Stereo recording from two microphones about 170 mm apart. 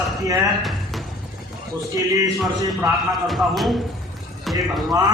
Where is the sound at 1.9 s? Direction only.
20° right (ahead or behind).